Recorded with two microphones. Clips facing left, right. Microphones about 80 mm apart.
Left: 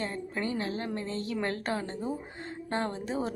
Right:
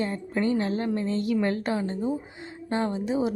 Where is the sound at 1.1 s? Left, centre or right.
Left.